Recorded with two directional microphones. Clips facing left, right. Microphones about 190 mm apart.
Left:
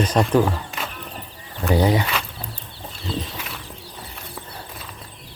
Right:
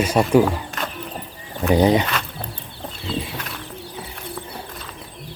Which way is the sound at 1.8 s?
20° right (ahead or behind).